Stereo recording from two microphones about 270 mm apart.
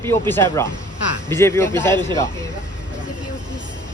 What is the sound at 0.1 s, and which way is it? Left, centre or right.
Speech, centre.